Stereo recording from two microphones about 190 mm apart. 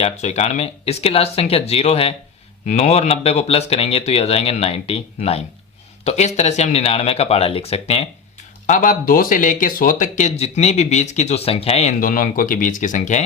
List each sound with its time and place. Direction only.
0.0 s speech: 35° left (ahead or behind)
8.6 s speech: 45° left (ahead or behind)
11.9 s speech: 45° left (ahead or behind)